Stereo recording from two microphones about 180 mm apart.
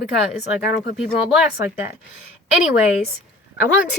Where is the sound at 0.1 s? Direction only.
5° right (ahead or behind).